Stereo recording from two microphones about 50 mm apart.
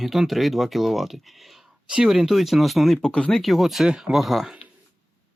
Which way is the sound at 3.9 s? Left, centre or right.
Centre.